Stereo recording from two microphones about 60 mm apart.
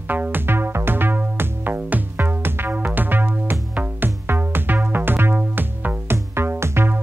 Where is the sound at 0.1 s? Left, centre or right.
Right.